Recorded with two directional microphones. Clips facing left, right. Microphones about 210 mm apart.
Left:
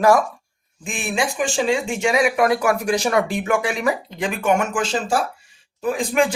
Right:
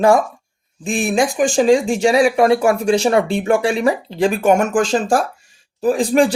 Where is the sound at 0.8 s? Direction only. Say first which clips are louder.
Right 7 dB; 40° right (ahead or behind).